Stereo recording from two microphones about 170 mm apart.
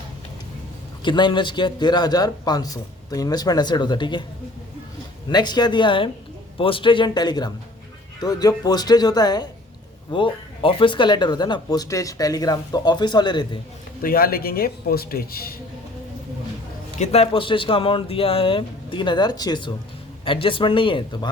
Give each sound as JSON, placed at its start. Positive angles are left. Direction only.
{"t": 1.0, "sound": "speech", "side_deg": 25}
{"t": 5.3, "sound": "speech", "side_deg": 25}
{"t": 14.0, "sound": "speech", "side_deg": 60}
{"t": 17.0, "sound": "speech", "side_deg": 35}